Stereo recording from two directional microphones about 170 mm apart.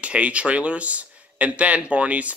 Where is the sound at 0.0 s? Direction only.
5° right (ahead or behind).